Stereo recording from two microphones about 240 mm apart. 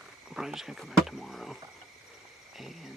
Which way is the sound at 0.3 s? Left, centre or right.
Centre.